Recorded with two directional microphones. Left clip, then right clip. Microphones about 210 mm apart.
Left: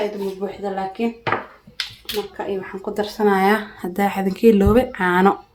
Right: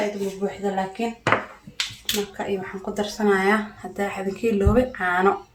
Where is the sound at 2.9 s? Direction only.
45° left (ahead or behind).